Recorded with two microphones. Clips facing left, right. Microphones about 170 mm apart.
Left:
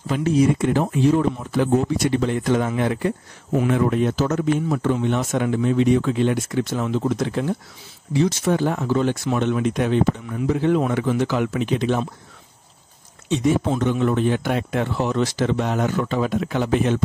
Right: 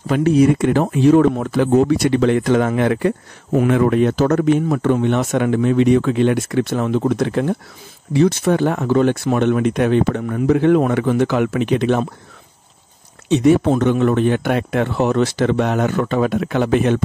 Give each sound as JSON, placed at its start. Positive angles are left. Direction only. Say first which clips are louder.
{"t": 0.0, "sound": "speech", "louder": "right 5 dB", "side_deg": -65}
{"t": 13.3, "sound": "speech", "louder": "right 6 dB", "side_deg": -65}